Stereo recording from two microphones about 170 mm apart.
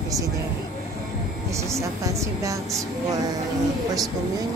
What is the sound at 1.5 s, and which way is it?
Speech, 15° right (ahead or behind).